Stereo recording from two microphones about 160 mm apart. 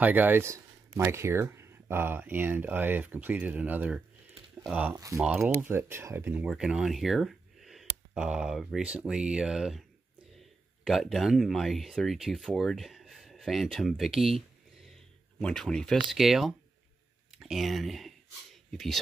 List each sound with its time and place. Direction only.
0.0 s speech: 10° right (ahead or behind)
4.9 s speech: 20° right (ahead or behind)
5.2 s speech: 5° right (ahead or behind)
15.4 s speech: 5° left (ahead or behind)